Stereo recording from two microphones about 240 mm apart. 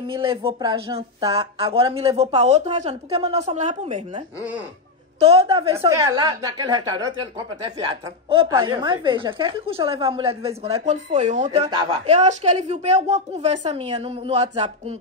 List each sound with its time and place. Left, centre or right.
0.1 s speech: right
5.2 s a woman's voice: right
8.3 s speech: centre
11.7 s a woman's voice: centre
12.2 s speech: right